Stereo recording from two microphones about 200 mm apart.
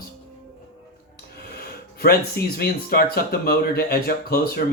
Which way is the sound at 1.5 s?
50° left (ahead or behind).